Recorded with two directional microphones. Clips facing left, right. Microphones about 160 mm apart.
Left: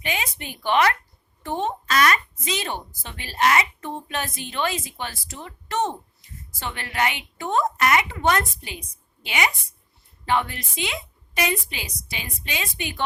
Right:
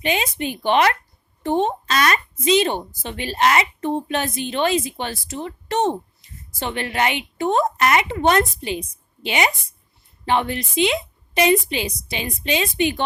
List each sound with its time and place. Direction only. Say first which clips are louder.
0.0 s a woman's voice: right 7 dB; 25° right (ahead or behind)